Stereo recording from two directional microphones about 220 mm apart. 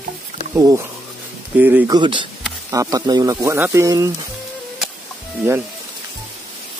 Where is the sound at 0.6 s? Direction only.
15° right (ahead or behind).